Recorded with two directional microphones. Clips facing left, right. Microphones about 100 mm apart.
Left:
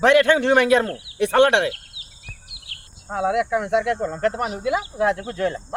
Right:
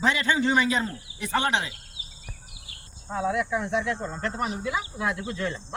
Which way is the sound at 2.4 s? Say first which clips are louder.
Left 4 dB; 75° left (ahead or behind).